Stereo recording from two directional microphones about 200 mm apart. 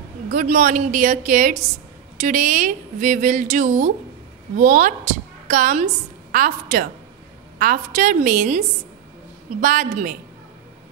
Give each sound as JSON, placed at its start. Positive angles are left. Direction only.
{"t": 0.3, "sound": "a woman's voice", "side_deg": -40}